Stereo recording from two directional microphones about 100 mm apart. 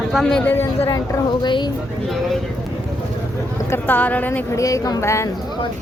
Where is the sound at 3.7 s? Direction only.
15° left (ahead or behind).